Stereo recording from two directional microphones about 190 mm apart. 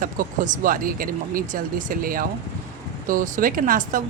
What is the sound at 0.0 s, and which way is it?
Speech, 45° right (ahead or behind).